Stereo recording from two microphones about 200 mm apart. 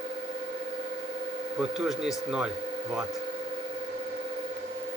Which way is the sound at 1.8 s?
Centre (ahead or behind).